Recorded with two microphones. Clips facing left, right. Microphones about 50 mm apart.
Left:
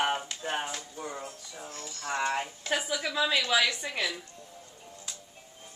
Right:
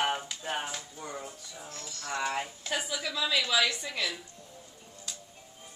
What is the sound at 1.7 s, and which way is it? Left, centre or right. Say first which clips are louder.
A woman's voice: left 2 dB; left.